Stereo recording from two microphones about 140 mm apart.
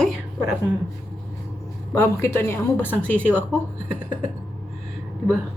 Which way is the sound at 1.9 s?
15° left (ahead or behind).